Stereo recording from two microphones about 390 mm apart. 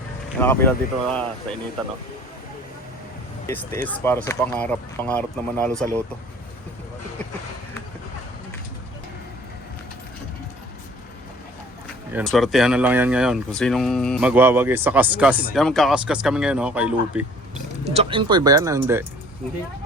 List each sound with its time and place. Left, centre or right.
0.3 s speech: centre
3.4 s speech: centre
12.1 s speech: centre
17.8 s speech: centre